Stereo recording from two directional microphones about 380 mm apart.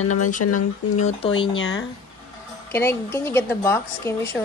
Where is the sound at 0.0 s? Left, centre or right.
Left.